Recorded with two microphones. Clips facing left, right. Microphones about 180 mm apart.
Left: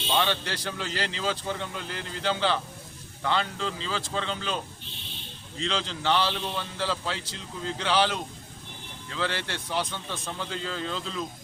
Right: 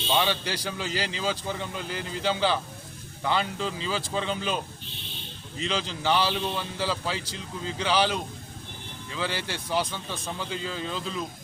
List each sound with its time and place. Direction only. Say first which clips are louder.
0.2 s a man's voice: right 1 dB; 5° right (ahead or behind)